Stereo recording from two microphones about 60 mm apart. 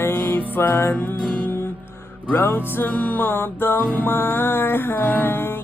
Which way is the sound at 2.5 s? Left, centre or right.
Left.